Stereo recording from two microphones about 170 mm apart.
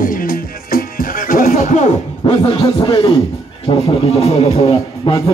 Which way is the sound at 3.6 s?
35° left (ahead or behind).